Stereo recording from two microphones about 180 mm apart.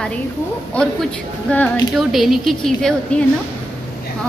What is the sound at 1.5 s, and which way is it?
A woman's voice, 10° left (ahead or behind).